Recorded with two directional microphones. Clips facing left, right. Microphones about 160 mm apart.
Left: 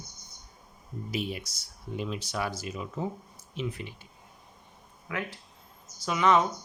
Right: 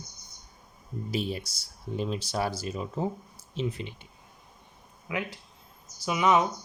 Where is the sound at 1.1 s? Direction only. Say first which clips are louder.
Right 2 dB; 30° right (ahead or behind).